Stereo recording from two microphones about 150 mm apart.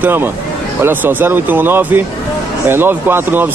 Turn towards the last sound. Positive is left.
turn(degrees=-15)  # may be behind; listen again after turning